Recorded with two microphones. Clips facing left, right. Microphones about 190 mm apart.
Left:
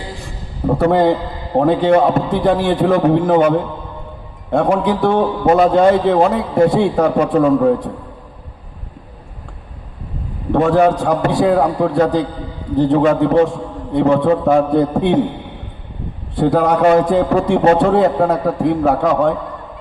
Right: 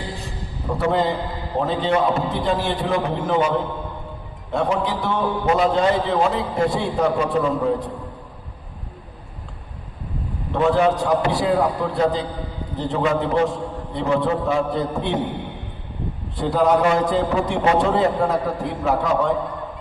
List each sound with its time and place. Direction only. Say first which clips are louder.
0.7 s a man's voice: left 7 dB; 55° left (ahead or behind)
4.5 s a man's voice: left 7 dB; 55° left (ahead or behind)
10.5 s a man's voice: left 5 dB; 50° left (ahead or behind)
16.3 s a man's voice: left 4 dB; 55° left (ahead or behind)
17.6 s a man's voice: left 5 dB; 50° left (ahead or behind)